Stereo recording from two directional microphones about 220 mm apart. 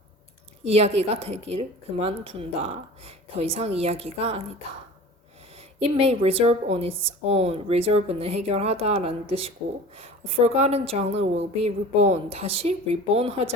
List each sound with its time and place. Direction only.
0.7 s a woman's voice: 30° right (ahead or behind)
5.5 s a woman's voice: 25° right (ahead or behind)